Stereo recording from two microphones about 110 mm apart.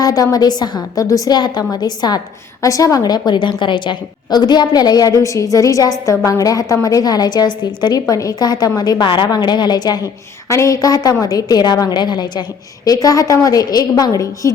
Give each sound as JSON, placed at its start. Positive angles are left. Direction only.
{"t": 0.0, "sound": "a woman's voice", "side_deg": 35}